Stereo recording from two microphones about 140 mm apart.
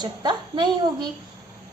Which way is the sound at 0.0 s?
30° right (ahead or behind).